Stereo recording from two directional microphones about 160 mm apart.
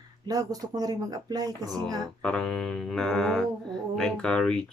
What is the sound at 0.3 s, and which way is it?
Speech, 25° right (ahead or behind).